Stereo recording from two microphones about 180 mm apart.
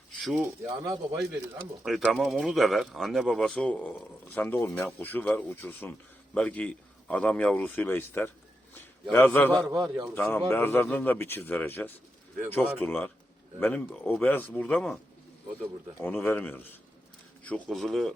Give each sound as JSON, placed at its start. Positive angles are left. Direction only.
{"t": 0.2, "sound": "speech", "side_deg": 0}
{"t": 0.6, "sound": "speech", "side_deg": -20}
{"t": 1.8, "sound": "a man's voice", "side_deg": -5}
{"t": 16.0, "sound": "a man's voice", "side_deg": 10}